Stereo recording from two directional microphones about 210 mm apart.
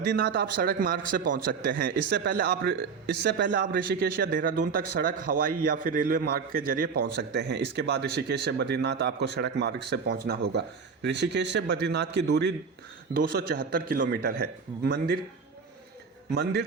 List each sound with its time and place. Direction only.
0.1 s a man's voice: 50° right (ahead or behind)
2.0 s a man's voice: 55° right (ahead or behind)
16.3 s a man's voice: 50° right (ahead or behind)